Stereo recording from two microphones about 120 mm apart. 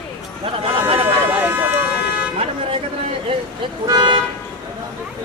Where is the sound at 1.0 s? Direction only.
15° right (ahead or behind).